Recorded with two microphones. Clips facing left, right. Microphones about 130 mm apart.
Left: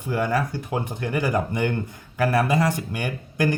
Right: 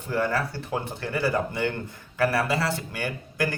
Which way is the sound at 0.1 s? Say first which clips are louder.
Left 2 dB; 15° left (ahead or behind).